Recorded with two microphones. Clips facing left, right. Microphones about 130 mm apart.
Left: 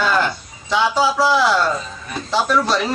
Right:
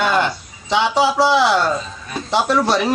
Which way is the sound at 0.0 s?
20° right (ahead or behind).